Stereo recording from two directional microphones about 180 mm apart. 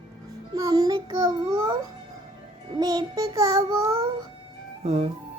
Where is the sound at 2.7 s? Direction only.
20° right (ahead or behind).